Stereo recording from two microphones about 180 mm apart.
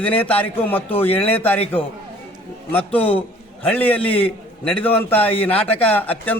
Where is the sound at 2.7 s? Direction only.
10° left (ahead or behind).